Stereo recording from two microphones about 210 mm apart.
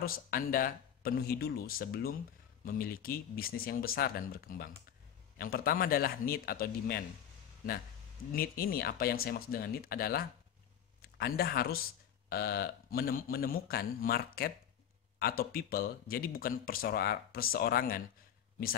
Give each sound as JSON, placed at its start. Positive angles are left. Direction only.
{"t": 0.0, "sound": "speech", "side_deg": 45}
{"t": 8.3, "sound": "speech", "side_deg": 45}